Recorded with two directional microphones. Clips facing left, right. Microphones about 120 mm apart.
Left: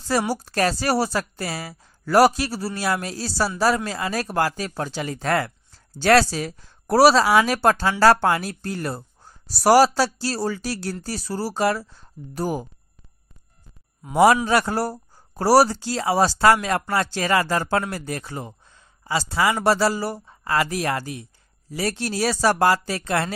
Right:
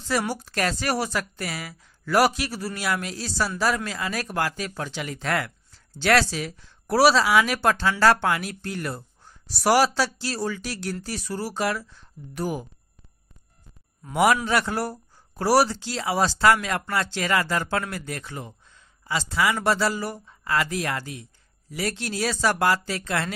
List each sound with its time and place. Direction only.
0.3 s a woman's voice: 35° left (ahead or behind)
14.1 s a woman's voice: 35° left (ahead or behind)